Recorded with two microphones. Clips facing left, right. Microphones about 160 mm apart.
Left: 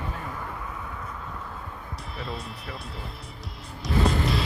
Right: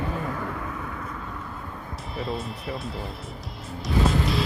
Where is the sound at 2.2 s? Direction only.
Centre (ahead or behind).